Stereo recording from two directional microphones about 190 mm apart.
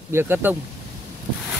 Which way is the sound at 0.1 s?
10° right (ahead or behind).